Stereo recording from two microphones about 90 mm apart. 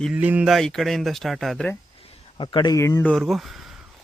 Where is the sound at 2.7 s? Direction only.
35° left (ahead or behind).